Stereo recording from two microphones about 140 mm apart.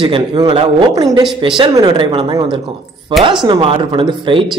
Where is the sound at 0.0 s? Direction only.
35° right (ahead or behind).